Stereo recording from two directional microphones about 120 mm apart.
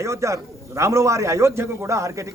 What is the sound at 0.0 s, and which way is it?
A man's voice, 25° right (ahead or behind).